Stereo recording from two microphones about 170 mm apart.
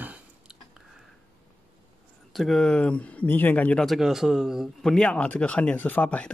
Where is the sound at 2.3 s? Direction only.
Centre (ahead or behind).